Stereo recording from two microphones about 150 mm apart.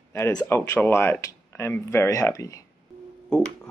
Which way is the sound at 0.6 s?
10° left (ahead or behind).